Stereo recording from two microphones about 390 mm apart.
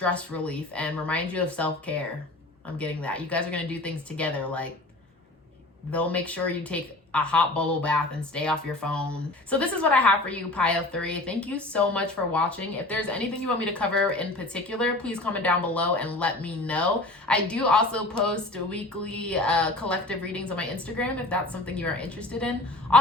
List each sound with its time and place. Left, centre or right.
0.0 s a woman's voice: centre
5.9 s a woman's voice: centre